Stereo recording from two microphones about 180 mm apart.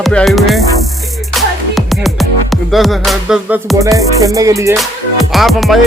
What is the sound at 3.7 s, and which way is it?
Music, 20° right (ahead or behind).